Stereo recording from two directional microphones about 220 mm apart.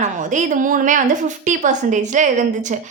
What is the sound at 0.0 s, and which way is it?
A woman's voice, 35° right (ahead or behind).